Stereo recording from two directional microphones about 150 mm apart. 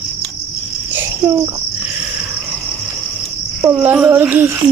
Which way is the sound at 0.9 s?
15° right (ahead or behind).